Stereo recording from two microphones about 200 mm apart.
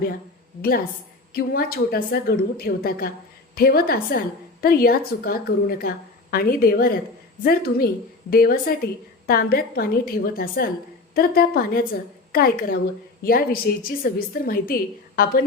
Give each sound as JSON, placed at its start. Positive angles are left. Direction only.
{"t": 1.3, "sound": "a woman's voice", "side_deg": 50}